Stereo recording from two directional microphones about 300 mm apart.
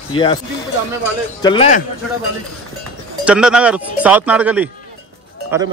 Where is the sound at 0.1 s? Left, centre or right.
Centre.